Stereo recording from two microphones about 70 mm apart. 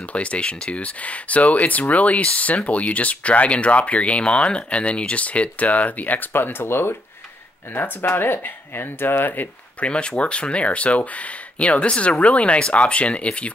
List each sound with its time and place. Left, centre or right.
0.1 s speech: centre